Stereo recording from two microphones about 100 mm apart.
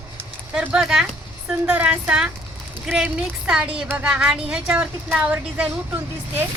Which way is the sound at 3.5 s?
10° right (ahead or behind).